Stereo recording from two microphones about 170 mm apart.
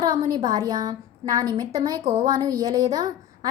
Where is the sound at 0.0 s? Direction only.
20° right (ahead or behind).